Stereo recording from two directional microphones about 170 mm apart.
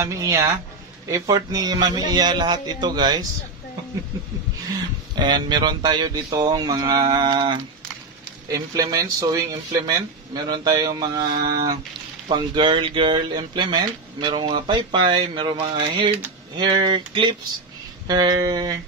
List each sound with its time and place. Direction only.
0.0 s speech: 20° right (ahead or behind)
5.1 s speech: 25° right (ahead or behind)